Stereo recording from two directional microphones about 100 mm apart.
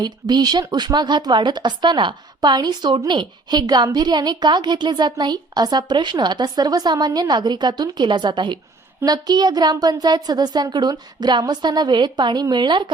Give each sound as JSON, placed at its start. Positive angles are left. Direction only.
{"t": 0.0, "sound": "a woman's voice", "side_deg": -45}